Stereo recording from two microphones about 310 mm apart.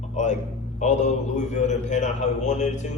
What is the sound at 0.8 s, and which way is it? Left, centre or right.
A man's voice, left.